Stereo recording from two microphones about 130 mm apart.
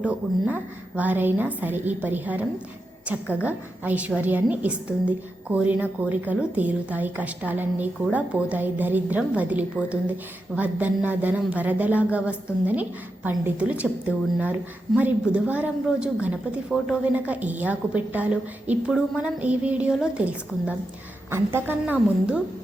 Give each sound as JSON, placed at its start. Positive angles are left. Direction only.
{"t": 0.0, "sound": "a woman's voice", "side_deg": -10}
{"t": 14.9, "sound": "a woman's voice", "side_deg": -10}
{"t": 17.0, "sound": "a woman's voice", "side_deg": -10}